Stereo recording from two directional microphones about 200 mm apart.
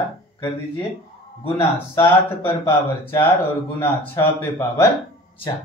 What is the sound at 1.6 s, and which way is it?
Speech, 15° left (ahead or behind).